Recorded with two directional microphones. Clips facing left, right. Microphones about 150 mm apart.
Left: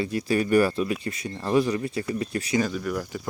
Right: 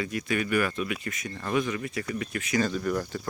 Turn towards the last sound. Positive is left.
turn(degrees=5)  # may be behind; listen again after turning